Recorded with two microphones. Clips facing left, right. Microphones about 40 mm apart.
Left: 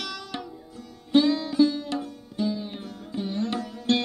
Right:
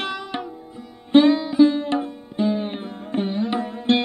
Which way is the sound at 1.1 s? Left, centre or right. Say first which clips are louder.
Right 6 dB; right.